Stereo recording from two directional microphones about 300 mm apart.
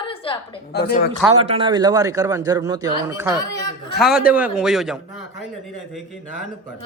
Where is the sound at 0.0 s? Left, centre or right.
Centre.